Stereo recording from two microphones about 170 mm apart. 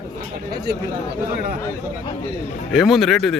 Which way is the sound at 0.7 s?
70° right (ahead or behind).